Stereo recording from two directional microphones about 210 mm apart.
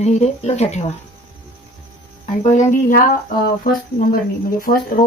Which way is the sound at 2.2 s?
35° left (ahead or behind).